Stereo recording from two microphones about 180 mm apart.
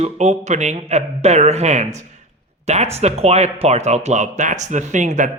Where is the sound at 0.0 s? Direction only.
40° right (ahead or behind).